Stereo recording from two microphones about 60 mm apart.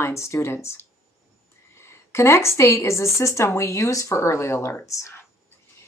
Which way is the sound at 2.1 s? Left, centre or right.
Left.